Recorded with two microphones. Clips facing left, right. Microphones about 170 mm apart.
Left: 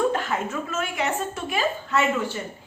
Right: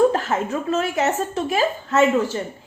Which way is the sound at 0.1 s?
40° right (ahead or behind).